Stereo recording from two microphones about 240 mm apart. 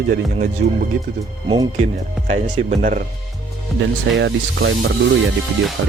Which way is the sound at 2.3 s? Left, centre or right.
Right.